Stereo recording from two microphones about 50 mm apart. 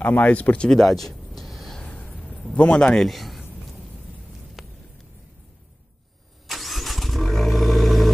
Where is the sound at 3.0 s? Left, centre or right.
Centre.